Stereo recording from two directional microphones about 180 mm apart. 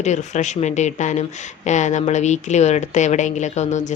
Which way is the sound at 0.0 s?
40° left (ahead or behind).